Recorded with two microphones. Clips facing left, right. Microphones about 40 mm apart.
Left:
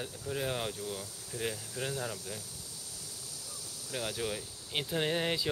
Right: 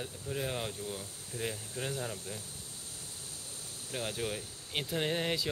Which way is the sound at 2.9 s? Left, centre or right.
Right.